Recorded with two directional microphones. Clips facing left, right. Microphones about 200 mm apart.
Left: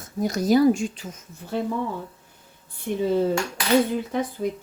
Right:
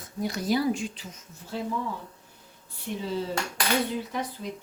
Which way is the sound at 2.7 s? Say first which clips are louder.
Left 9 dB; 55° left (ahead or behind).